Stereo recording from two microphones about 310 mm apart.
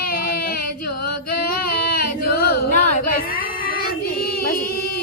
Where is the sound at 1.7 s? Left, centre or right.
Left.